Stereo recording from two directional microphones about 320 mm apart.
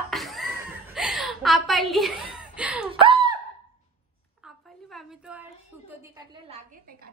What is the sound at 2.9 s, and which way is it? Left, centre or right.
Laughter, centre.